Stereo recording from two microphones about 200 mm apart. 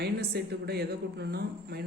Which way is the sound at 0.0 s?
55° right (ahead or behind).